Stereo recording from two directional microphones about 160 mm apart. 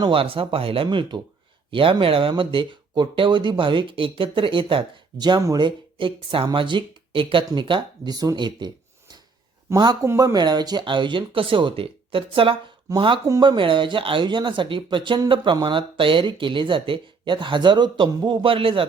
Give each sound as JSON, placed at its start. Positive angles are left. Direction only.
{"t": 0.0, "sound": "speech", "side_deg": -35}